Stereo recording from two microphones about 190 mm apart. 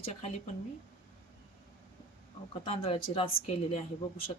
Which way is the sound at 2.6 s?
30° left (ahead or behind).